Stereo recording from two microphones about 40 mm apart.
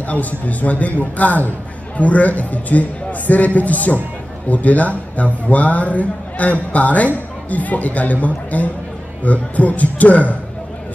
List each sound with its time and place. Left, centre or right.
0.0 s a man's voice: left